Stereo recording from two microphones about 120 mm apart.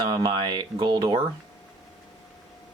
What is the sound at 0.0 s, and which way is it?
Speech, 40° right (ahead or behind).